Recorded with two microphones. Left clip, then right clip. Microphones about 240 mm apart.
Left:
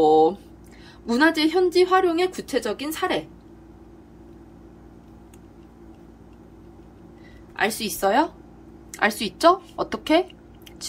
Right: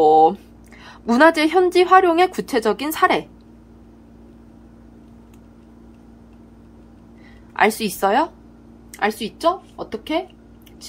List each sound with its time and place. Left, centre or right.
0.0 s a woman's voice: centre
7.5 s a woman's voice: centre